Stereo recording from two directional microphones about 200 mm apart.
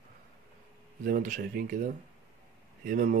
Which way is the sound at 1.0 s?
40° right (ahead or behind).